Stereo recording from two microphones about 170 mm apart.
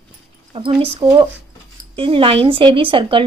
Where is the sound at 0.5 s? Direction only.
35° right (ahead or behind).